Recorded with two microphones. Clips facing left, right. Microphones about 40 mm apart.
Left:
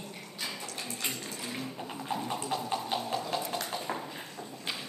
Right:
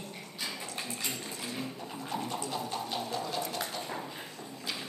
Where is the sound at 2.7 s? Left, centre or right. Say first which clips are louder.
Left 2 dB; centre.